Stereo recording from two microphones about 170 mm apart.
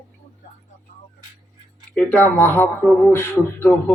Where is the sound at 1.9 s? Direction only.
10° left (ahead or behind).